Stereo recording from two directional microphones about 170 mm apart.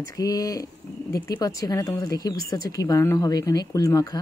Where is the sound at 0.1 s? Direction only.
20° left (ahead or behind).